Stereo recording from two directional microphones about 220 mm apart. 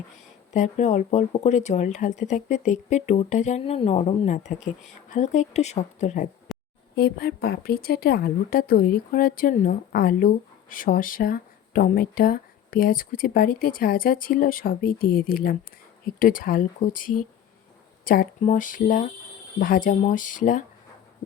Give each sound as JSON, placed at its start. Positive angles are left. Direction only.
{"t": 0.5, "sound": "speech", "side_deg": 30}
{"t": 6.5, "sound": "a sound", "side_deg": 0}
{"t": 6.9, "sound": "a woman's voice", "side_deg": 45}